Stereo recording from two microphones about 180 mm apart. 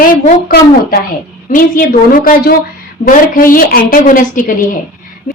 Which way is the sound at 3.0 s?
50° left (ahead or behind).